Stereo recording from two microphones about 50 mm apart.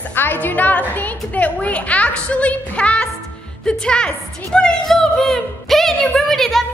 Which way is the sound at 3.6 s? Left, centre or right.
Centre.